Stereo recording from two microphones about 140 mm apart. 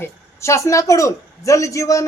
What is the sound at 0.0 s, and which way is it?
A woman's voice, 20° left (ahead or behind).